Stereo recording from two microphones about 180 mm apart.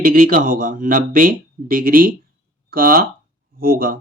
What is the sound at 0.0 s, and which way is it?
Speech, 50° right (ahead or behind).